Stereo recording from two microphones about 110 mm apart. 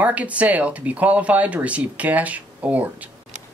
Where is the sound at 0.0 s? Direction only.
15° right (ahead or behind).